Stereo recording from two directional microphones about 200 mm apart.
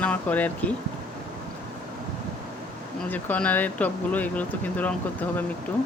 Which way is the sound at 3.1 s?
10° left (ahead or behind).